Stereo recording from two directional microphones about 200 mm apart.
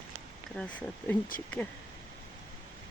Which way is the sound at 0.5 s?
5° left (ahead or behind).